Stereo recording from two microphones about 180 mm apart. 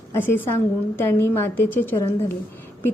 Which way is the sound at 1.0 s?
15° left (ahead or behind).